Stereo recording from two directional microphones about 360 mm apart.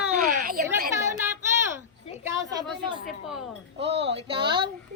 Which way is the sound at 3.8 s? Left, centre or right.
Right.